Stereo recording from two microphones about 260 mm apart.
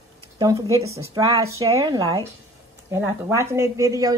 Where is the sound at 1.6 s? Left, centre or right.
Centre.